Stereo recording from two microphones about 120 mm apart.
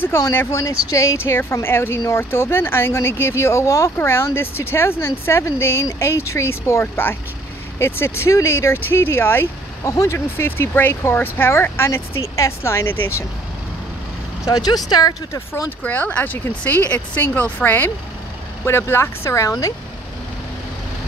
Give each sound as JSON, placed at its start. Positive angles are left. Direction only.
{"t": 0.0, "sound": "speech", "side_deg": 20}
{"t": 14.4, "sound": "speech", "side_deg": 35}
{"t": 15.8, "sound": "speech", "side_deg": 10}